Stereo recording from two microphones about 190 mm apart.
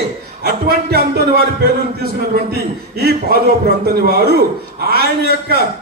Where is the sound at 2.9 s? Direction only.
55° right (ahead or behind).